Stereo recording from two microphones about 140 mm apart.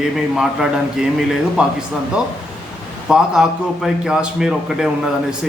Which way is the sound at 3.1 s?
5° right (ahead or behind).